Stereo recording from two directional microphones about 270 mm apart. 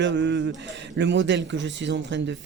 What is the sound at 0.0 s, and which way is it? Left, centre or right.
A man's voice, right.